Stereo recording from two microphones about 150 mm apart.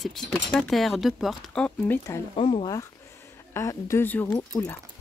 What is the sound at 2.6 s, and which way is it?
Speech, 20° left (ahead or behind).